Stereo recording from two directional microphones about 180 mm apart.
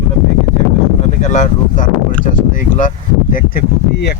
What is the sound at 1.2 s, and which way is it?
Speech, 40° left (ahead or behind).